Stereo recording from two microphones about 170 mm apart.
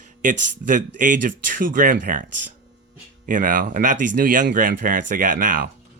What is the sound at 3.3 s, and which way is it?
Speech, 50° right (ahead or behind).